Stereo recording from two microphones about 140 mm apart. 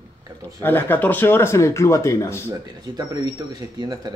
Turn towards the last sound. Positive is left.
turn(degrees=-30)  # may be behind; listen again after turning